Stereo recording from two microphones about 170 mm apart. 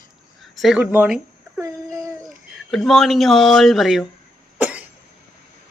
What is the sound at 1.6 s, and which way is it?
Child singing, 20° right (ahead or behind).